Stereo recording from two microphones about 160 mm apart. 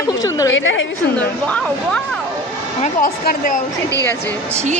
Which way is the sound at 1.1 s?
10° left (ahead or behind).